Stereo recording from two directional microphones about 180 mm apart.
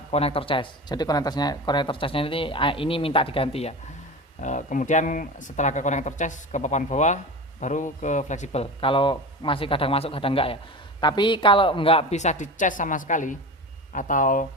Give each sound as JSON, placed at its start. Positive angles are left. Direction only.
{"t": 0.1, "sound": "speech", "side_deg": 35}